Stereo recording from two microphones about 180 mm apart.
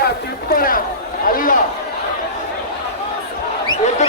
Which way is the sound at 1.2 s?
50° left (ahead or behind).